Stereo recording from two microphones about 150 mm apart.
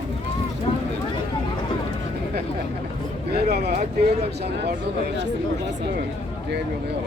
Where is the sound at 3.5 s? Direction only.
90° right.